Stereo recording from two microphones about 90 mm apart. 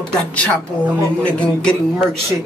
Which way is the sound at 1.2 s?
15° left (ahead or behind).